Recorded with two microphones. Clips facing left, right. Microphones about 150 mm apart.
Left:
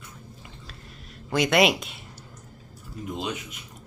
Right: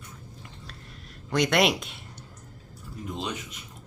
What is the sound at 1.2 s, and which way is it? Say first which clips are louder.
Speech: left 2 dB; 5° left (ahead or behind).